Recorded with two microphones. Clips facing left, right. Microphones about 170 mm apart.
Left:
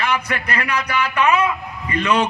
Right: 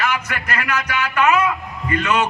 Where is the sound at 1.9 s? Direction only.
35° left (ahead or behind).